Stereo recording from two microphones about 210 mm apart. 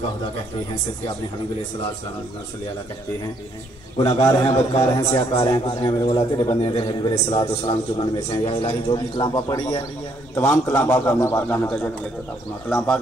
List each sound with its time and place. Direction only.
4.5 s a man's voice: 30° left (ahead or behind); by 13.0 s 5° left (ahead or behind)